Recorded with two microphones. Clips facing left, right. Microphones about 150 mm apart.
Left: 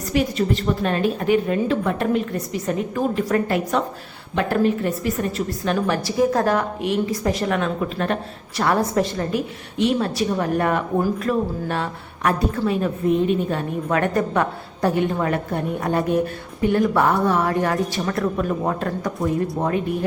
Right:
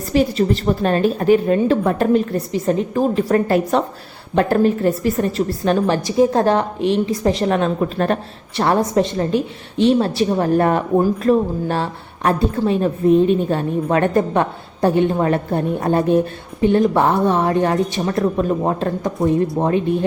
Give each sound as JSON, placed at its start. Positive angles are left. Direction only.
{"t": 0.1, "sound": "a woman's voice", "side_deg": -35}
{"t": 8.5, "sound": "a woman's voice", "side_deg": -25}